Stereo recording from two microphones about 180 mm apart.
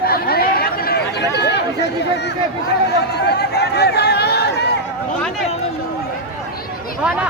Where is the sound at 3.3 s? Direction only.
65° left (ahead or behind).